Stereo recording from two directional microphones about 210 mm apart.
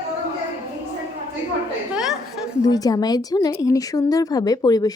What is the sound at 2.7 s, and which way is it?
A woman's voice, 15° left (ahead or behind).